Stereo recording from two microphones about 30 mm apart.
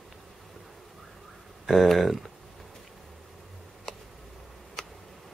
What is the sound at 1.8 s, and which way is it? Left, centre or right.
Speech, centre.